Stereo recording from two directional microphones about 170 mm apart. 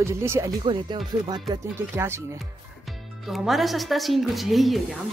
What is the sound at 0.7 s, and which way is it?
Speech, 30° right (ahead or behind).